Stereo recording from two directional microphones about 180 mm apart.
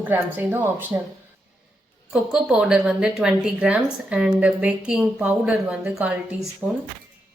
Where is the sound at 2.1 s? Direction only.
Centre (ahead or behind).